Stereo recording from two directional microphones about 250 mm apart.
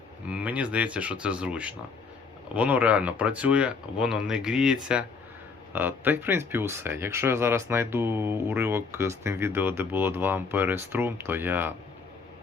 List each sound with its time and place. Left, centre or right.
0.3 s speech: centre